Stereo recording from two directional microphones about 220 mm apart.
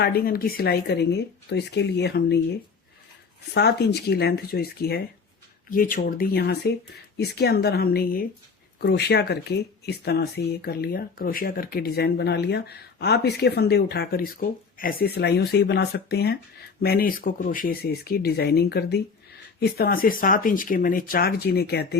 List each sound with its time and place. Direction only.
0.0 s speech: 45° left (ahead or behind)
3.5 s speech: 50° left (ahead or behind)